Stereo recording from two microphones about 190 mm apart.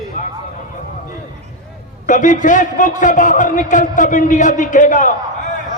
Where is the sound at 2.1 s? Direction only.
45° left (ahead or behind).